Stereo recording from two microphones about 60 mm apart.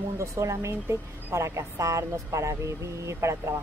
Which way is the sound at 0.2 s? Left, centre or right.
Right.